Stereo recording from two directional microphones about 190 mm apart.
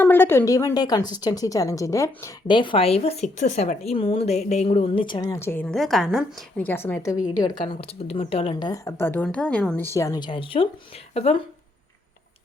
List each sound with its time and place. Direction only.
0.0 s a woman's voice: 10° left (ahead or behind)
6.7 s speech: 10° left (ahead or behind)
9.9 s a woman's voice: 15° left (ahead or behind); by 11.4 s 35° left (ahead or behind)